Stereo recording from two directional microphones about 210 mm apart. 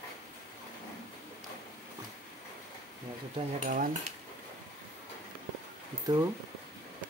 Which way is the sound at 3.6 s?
40° right (ahead or behind).